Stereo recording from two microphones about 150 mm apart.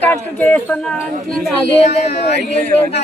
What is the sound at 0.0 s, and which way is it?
Speech, 10° left (ahead or behind).